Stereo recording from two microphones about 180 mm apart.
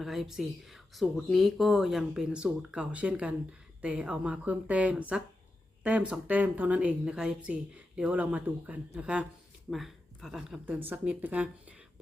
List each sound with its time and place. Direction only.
0.0 s a woman's voice: centre (ahead or behind)